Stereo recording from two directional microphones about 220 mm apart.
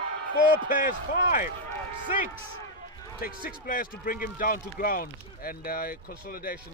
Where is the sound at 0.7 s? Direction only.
35° left (ahead or behind).